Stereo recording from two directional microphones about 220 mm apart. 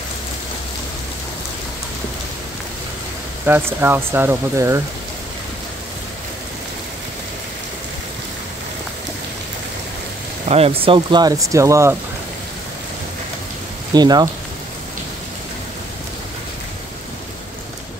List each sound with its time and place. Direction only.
3.4 s speech: 10° right (ahead or behind)
10.5 s speech: 25° right (ahead or behind)
13.9 s speech: 20° right (ahead or behind)